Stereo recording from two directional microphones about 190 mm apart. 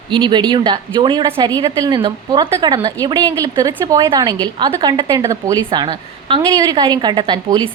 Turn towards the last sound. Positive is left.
turn(degrees=-20)  # may be behind; listen again after turning